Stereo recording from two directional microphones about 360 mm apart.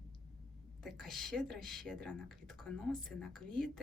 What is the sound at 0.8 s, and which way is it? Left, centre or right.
Speech, centre.